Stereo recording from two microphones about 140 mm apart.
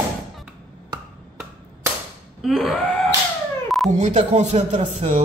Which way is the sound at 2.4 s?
Centre (ahead or behind).